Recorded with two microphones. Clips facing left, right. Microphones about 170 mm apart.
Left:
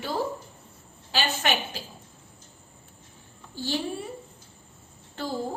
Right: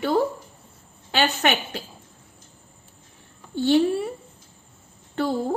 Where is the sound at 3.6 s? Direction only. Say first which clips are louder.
Right 11 dB; 60° right (ahead or behind).